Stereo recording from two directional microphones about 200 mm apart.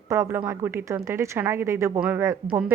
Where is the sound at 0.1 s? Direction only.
10° right (ahead or behind).